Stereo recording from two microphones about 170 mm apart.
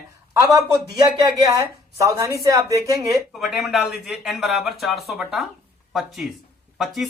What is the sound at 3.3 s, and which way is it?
Speech, centre (ahead or behind).